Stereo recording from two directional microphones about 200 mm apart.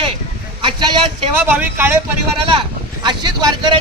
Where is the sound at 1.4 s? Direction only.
10° right (ahead or behind).